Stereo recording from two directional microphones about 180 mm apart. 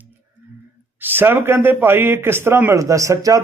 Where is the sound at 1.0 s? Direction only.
10° right (ahead or behind).